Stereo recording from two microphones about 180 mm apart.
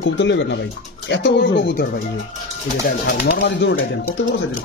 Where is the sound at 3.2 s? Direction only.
75° left (ahead or behind).